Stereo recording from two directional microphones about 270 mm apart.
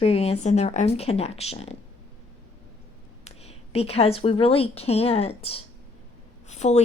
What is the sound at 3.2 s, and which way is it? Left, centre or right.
A woman's voice, left.